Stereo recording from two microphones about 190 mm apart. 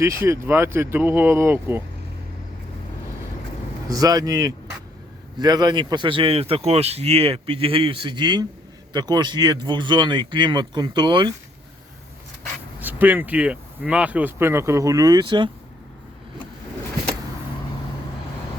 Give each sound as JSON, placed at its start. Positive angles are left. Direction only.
{"t": 0.0, "sound": "speech", "side_deg": -15}
{"t": 3.8, "sound": "speech", "side_deg": -20}
{"t": 12.8, "sound": "speech", "side_deg": -10}